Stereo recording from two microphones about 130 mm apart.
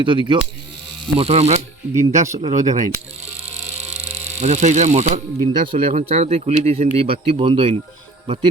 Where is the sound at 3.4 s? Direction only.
55° right (ahead or behind).